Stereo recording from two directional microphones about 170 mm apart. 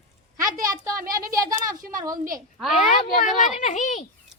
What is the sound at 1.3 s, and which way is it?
Speech, 20° right (ahead or behind).